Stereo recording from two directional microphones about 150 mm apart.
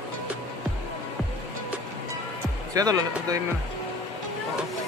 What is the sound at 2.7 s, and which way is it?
Speech, 25° right (ahead or behind).